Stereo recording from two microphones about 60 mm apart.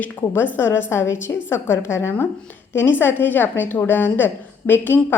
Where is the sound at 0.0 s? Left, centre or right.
Left.